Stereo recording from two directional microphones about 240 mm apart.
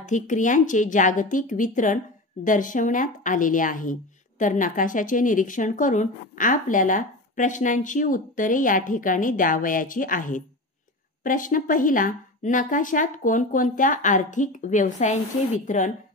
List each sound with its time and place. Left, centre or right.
0.0 s a woman's voice: left